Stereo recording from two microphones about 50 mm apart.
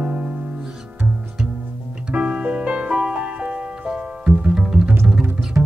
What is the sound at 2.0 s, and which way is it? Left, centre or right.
Music, right.